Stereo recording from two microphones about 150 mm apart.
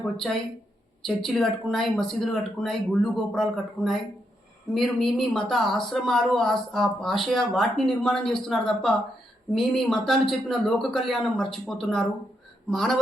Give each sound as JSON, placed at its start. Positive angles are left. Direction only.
{"t": 0.0, "sound": "speech", "side_deg": 0}